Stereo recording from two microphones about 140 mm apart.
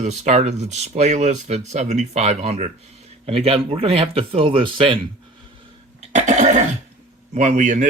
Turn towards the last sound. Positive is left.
turn(degrees=-60)  # may be behind; listen again after turning